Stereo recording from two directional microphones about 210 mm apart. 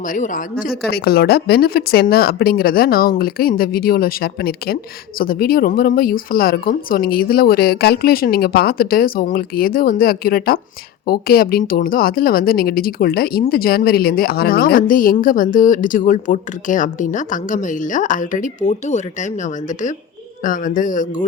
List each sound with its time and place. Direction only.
0.1 s a woman's voice: 40° left (ahead or behind)